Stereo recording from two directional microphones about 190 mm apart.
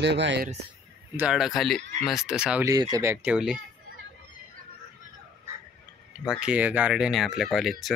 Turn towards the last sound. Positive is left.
turn(degrees=0)  # may be behind; listen again after turning